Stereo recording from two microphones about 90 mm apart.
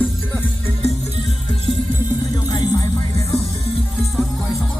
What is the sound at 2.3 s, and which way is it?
Music, 50° left (ahead or behind).